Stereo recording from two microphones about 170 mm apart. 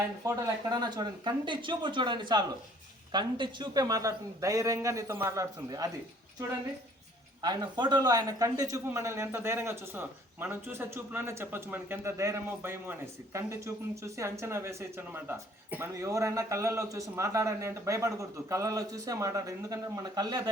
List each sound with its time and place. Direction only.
0.3 s a man's voice: 25° right (ahead or behind)
7.4 s a man's voice: 25° right (ahead or behind)